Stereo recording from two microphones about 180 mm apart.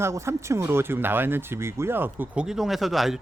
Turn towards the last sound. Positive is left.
turn(degrees=0)  # may be behind; listen again after turning